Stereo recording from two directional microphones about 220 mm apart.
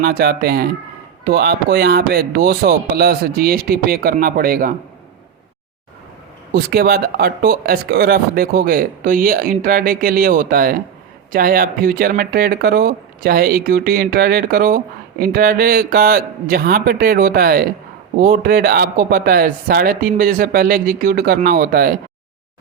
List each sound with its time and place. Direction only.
0.0 s speech: 45° right (ahead or behind)
6.5 s speech: 45° right (ahead or behind)